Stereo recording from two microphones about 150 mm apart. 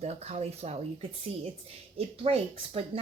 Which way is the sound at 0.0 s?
45° right (ahead or behind).